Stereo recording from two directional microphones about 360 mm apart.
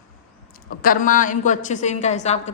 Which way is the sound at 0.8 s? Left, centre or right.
Left.